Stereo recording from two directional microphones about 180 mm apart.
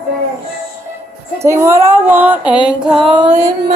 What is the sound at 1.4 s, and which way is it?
Speech, 15° right (ahead or behind).